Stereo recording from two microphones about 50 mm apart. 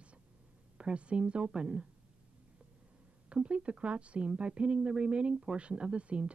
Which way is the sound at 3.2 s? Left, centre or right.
Right.